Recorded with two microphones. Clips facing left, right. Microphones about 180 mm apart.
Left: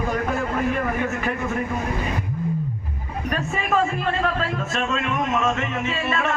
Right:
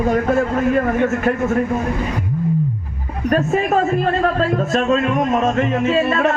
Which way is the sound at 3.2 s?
40° right (ahead or behind).